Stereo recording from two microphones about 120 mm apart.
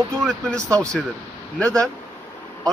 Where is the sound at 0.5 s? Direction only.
25° right (ahead or behind).